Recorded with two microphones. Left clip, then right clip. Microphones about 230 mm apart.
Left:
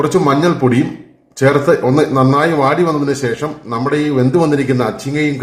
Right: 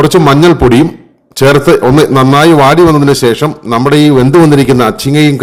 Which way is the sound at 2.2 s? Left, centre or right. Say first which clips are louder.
Right 9 dB; right.